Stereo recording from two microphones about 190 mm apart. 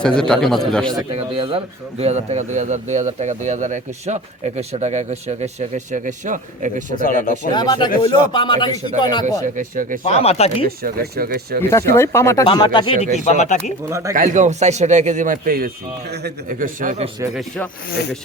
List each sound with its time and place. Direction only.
0.0 s a man's voice: 5° left (ahead or behind)
1.1 s speech: 30° right (ahead or behind)
7.0 s speech: 45° left (ahead or behind)
7.5 s speech: 25° left (ahead or behind)
9.6 s a man's voice: 45° right (ahead or behind)
10.1 s speech: 35° left (ahead or behind)
10.8 s a man's voice: 50° right (ahead or behind)
11.7 s speech: 15° left (ahead or behind)
13.1 s speech: 35° left (ahead or behind)
14.1 s a man's voice: 45° right (ahead or behind)